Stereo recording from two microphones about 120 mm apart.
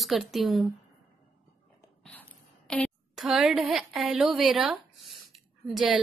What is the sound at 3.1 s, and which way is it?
Speech, 5° right (ahead or behind).